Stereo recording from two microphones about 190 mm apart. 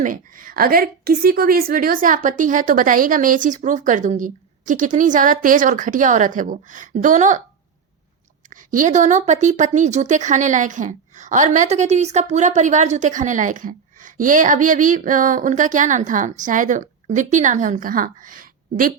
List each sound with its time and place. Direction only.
0.0 s a woman's voice: 45° right (ahead or behind)
8.4 s speech: 40° right (ahead or behind)